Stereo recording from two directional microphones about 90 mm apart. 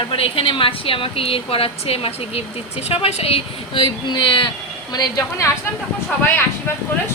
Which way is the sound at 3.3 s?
75° left (ahead or behind).